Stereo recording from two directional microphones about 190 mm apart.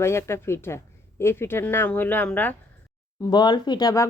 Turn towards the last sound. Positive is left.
turn(degrees=20)  # may be behind; listen again after turning